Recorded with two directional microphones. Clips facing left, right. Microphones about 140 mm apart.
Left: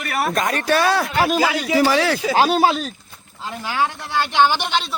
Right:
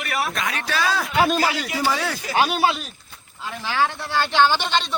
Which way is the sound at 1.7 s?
90° left.